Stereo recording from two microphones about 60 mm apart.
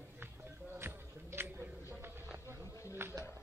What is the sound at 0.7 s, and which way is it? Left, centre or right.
Music, right.